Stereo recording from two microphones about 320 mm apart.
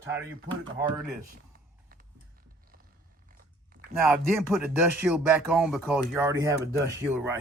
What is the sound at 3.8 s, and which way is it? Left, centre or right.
Speech, centre.